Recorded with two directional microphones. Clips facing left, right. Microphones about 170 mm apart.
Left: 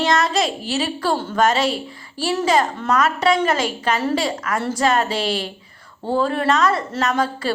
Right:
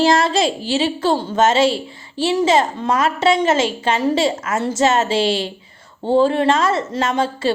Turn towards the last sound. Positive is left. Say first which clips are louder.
# right 2 dB
turn(degrees=-25)  # may be behind; listen again after turning